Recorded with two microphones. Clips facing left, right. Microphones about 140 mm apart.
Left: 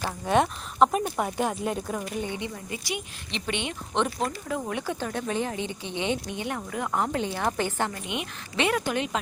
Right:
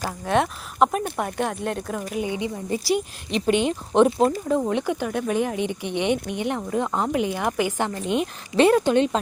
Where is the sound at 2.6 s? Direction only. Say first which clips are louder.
Right 10 dB; 35° right (ahead or behind).